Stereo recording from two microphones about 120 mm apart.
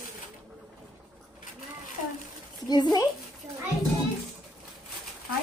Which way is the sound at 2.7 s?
35° left (ahead or behind).